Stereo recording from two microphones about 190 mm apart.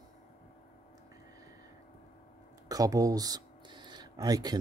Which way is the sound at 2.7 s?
20° right (ahead or behind).